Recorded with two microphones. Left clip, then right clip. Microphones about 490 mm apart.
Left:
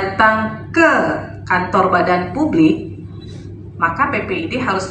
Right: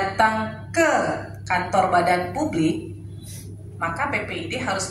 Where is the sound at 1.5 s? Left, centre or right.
Right.